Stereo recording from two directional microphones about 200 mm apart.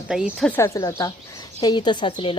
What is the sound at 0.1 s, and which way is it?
A woman's voice, centre (ahead or behind).